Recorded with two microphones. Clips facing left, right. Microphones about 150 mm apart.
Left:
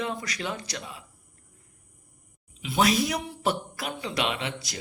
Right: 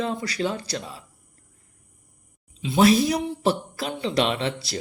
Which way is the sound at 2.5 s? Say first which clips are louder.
Right 6 dB; 30° right (ahead or behind).